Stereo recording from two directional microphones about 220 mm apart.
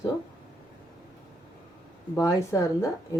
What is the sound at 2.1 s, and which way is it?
Speech, 15° left (ahead or behind).